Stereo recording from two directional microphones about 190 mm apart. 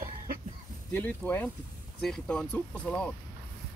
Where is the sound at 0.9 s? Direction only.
10° left (ahead or behind).